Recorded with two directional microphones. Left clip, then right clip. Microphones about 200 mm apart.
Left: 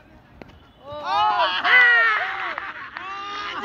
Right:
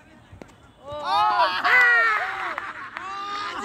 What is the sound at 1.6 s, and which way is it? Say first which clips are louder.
Caw: left 3 dB; 15° right (ahead or behind).